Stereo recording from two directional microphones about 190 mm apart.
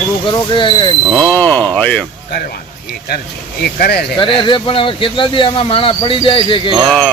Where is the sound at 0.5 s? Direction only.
25° left (ahead or behind).